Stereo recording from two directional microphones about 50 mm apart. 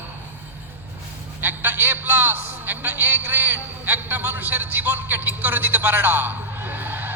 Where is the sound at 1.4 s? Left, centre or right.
Right.